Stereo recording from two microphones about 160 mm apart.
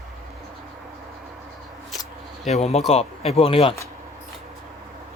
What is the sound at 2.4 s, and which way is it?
Speech, 45° left (ahead or behind).